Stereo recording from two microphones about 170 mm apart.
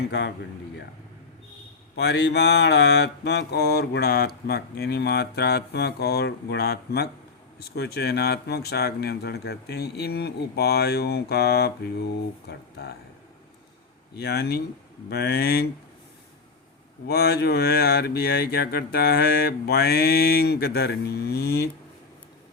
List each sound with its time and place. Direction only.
0.1 s mantra: 90° left
2.0 s mantra: 90° left
14.2 s mantra: 75° left (ahead or behind)
17.1 s mantra: 70° left (ahead or behind)